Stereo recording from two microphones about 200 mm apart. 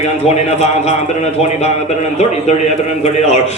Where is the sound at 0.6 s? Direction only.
35° left (ahead or behind).